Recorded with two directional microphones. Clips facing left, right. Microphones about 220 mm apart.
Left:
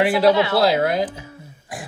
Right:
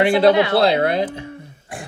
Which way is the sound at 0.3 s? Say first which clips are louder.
Right 2 dB; 20° right (ahead or behind).